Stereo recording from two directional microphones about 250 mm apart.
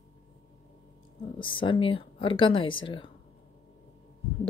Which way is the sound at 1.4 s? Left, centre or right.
Centre.